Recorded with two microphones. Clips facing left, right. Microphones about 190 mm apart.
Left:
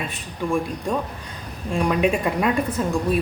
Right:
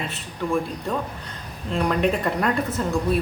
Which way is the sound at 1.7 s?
10° left (ahead or behind).